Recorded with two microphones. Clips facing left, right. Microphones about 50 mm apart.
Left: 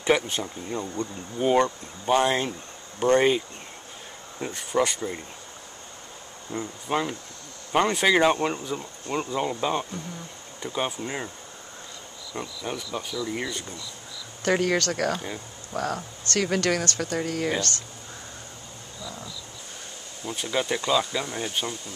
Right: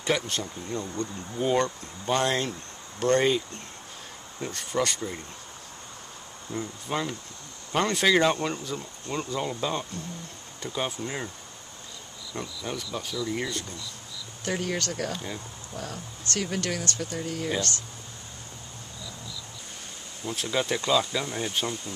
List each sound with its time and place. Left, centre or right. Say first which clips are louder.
0.0 s speech: left 4 dB; centre
6.5 s speech: left 3 dB; centre
12.4 s speech: left 2 dB; centre
14.4 s speech: left 7 dB; left
15.1 s speech: left 2 dB; centre
15.7 s speech: left 9 dB; left
20.2 s speech: left 1 dB; centre